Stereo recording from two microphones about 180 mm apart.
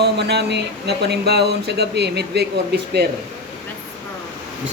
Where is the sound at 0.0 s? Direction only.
65° right (ahead or behind).